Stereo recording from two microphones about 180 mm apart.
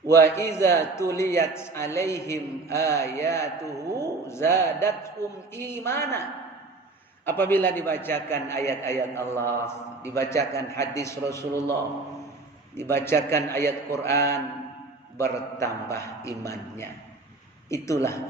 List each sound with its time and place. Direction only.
0.1 s a man's voice: 15° left (ahead or behind)
3.8 s a man's voice: 20° right (ahead or behind)
4.3 s a man's voice: 15° left (ahead or behind)
7.3 s a man's voice: 10° left (ahead or behind)
12.7 s a man's voice: 15° left (ahead or behind)